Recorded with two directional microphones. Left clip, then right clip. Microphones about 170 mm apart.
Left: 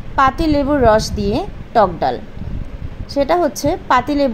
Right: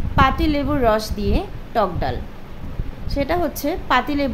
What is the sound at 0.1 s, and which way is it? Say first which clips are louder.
A woman's voice: left 4 dB; 20° left (ahead or behind).